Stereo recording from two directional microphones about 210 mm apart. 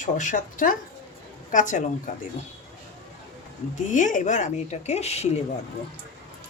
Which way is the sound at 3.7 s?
35° left (ahead or behind).